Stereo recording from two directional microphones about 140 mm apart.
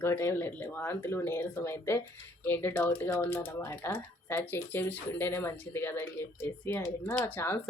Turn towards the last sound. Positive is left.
turn(degrees=15)  # may be behind; listen again after turning